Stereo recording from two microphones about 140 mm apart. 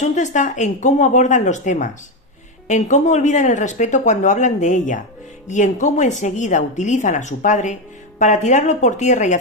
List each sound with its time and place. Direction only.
0.0 s speech: 60° left (ahead or behind)